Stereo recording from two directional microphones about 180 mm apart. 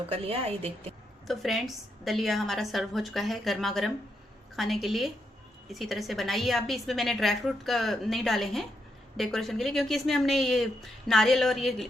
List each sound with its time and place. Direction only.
0.1 s a woman's voice: 35° right (ahead or behind)
1.3 s a woman's voice: centre (ahead or behind)